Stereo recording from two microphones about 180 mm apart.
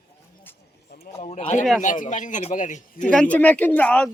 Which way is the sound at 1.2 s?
35° left (ahead or behind).